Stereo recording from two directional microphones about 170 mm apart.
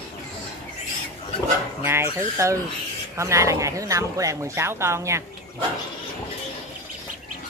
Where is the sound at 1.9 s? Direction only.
15° right (ahead or behind).